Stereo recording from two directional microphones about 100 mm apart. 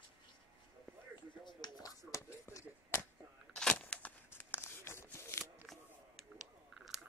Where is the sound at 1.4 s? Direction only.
45° left (ahead or behind).